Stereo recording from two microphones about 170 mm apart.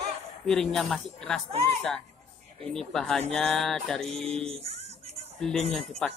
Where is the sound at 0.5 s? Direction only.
5° left (ahead or behind).